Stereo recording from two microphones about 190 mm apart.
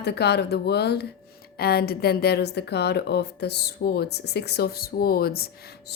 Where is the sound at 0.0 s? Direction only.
60° left (ahead or behind).